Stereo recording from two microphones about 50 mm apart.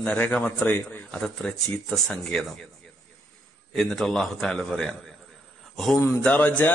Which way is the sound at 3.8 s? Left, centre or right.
Centre.